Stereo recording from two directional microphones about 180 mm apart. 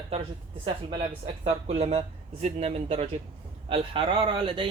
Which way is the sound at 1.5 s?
35° right (ahead or behind).